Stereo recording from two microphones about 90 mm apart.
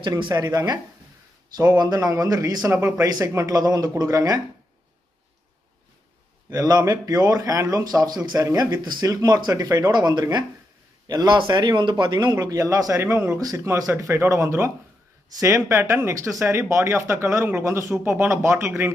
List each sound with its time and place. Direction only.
0.0 s speech: 55° right (ahead or behind); by 4.4 s 40° right (ahead or behind)
6.5 s speech: 40° right (ahead or behind)
9.8 s speech: 50° right (ahead or behind); by 18.9 s 30° right (ahead or behind)